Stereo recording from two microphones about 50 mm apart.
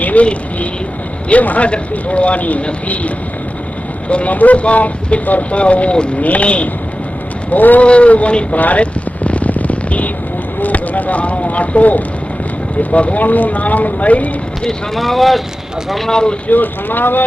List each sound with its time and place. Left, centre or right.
0.0 s speech: left
4.1 s speech: left
8.5 s a sound: left
10.6 s speech: left
14.9 s speech: centre
16.0 s speech: centre
16.5 s speech: left